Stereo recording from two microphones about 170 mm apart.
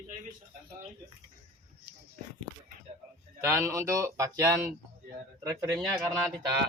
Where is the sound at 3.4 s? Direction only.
15° right (ahead or behind).